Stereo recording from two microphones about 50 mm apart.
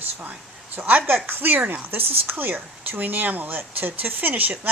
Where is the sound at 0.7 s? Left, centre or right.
Right.